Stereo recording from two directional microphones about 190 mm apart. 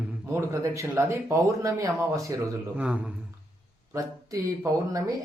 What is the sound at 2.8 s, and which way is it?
Speech, 5° right (ahead or behind).